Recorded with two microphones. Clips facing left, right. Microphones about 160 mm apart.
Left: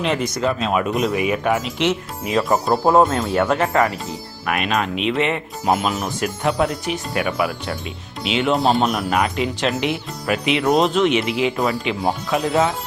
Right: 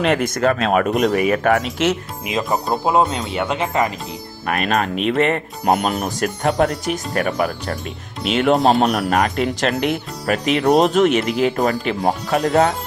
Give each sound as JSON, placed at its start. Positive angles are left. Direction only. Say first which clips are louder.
{"t": 0.0, "sound": "speech", "louder": "right 3 dB", "side_deg": -55}
{"t": 2.2, "sound": "speech", "louder": "left 3 dB", "side_deg": -20}
{"t": 2.5, "sound": "speech", "louder": "left 2 dB", "side_deg": 0}
{"t": 3.5, "sound": "speech", "louder": "even", "side_deg": -20}
{"t": 4.4, "sound": "speech", "louder": "right 2 dB", "side_deg": -40}
{"t": 6.1, "sound": "speech", "louder": "right 2 dB", "side_deg": -45}